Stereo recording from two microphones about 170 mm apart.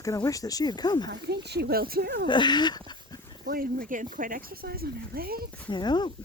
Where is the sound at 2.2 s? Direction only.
25° left (ahead or behind).